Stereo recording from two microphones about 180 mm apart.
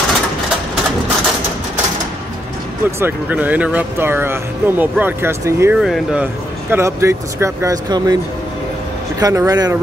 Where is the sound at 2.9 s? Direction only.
15° right (ahead or behind).